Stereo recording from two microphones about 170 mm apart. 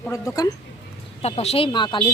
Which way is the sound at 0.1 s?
20° left (ahead or behind).